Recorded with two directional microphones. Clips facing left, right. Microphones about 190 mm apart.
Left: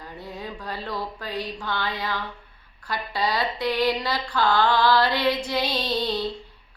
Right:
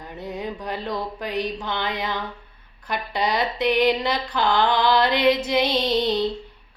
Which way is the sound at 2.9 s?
20° right (ahead or behind).